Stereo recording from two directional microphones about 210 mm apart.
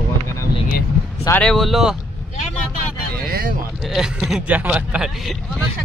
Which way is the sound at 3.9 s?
Centre (ahead or behind).